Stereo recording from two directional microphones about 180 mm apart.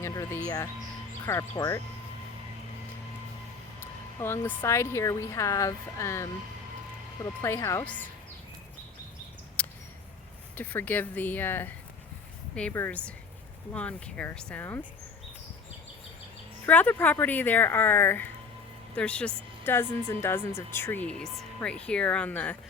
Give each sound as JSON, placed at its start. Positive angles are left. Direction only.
{"t": 0.0, "sound": "a sound", "side_deg": 15}
{"t": 0.4, "sound": "speech", "side_deg": 15}
{"t": 4.2, "sound": "speech", "side_deg": 15}
{"t": 9.6, "sound": "a sound", "side_deg": 10}
{"t": 10.6, "sound": "speech", "side_deg": 10}
{"t": 16.6, "sound": "speech", "side_deg": 10}